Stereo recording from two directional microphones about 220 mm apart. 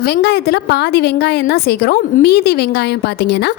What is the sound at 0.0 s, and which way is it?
A woman's voice, 45° left (ahead or behind).